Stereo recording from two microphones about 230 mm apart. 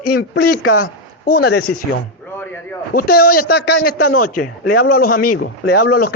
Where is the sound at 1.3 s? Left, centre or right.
Left.